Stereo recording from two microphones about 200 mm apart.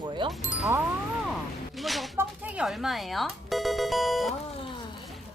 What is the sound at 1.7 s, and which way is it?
Speech, centre (ahead or behind).